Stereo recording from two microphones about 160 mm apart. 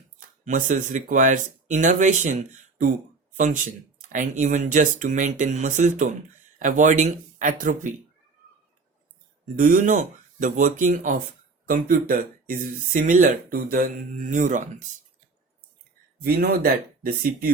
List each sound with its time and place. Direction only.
0.4 s speech: 55° right (ahead or behind)
9.6 s speech: 55° right (ahead or behind)
16.2 s speech: 70° right (ahead or behind)